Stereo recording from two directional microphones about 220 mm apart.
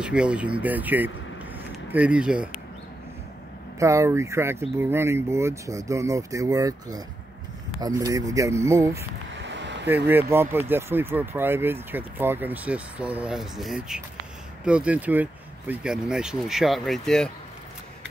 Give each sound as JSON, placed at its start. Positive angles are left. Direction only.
{"t": 0.0, "sound": "speech", "side_deg": -5}
{"t": 3.8, "sound": "speech", "side_deg": -15}
{"t": 9.3, "sound": "a sound", "side_deg": -55}
{"t": 9.8, "sound": "speech", "side_deg": -10}